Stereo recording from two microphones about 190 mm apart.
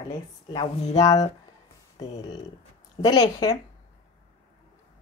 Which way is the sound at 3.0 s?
20° left (ahead or behind).